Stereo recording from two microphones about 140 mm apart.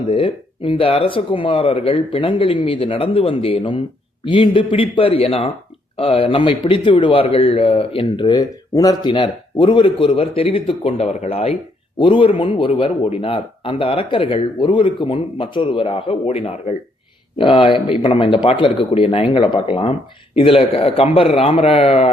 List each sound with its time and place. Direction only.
0.1 s a man's voice: 40° left (ahead or behind)
11.9 s a man's voice: 35° left (ahead or behind)